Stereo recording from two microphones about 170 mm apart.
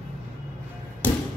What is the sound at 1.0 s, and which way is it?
Thump, 10° left (ahead or behind).